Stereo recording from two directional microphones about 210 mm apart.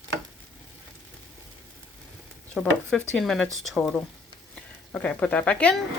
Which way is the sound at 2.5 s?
5° left (ahead or behind).